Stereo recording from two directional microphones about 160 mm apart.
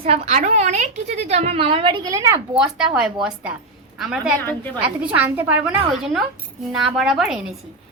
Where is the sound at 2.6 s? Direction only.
5° right (ahead or behind).